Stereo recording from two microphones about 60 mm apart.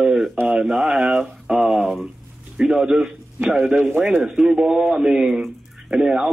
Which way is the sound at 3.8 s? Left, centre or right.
Right.